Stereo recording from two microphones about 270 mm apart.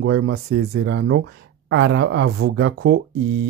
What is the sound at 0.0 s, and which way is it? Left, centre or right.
A woman's voice, right.